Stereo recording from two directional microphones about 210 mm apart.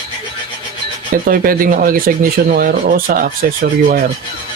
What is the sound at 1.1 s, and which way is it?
Speech, 40° right (ahead or behind).